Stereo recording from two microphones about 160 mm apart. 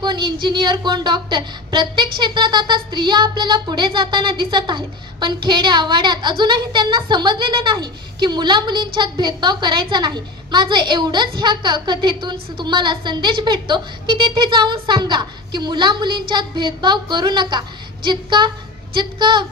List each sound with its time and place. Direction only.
0.0 s a woman's voice: 30° right (ahead or behind)